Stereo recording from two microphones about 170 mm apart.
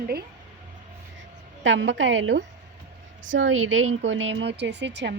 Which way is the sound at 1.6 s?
90° right.